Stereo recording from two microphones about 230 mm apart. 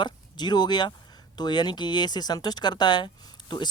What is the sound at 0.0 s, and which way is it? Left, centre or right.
Speech, centre.